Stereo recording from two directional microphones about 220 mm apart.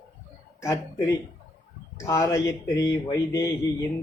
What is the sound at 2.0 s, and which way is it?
Speech, 15° left (ahead or behind).